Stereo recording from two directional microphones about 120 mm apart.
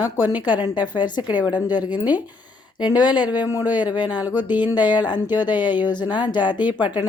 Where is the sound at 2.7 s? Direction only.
40° left (ahead or behind).